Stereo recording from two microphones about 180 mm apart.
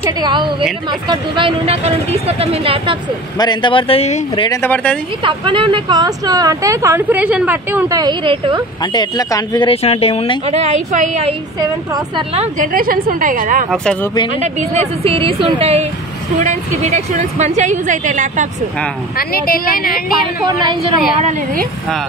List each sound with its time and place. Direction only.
0.0 s speech: 25° right (ahead or behind)
3.3 s speech: 25° left (ahead or behind)
4.5 s speech: 10° left (ahead or behind)
5.2 s speech: 25° right (ahead or behind); by 8.0 s 10° right (ahead or behind)
8.0 s speech: 25° right (ahead or behind)
8.9 s speech: 20° left (ahead or behind)
9.8 s speech: 35° left (ahead or behind)
10.4 s speech: 35° right (ahead or behind)
12.4 s a woman's voice: 50° right (ahead or behind)
19.1 s speech: 55° left (ahead or behind)
21.2 s a woman's voice: 40° right (ahead or behind)